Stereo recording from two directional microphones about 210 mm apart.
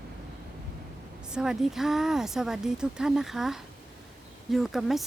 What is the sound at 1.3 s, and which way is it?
A woman's voice, 5° right (ahead or behind).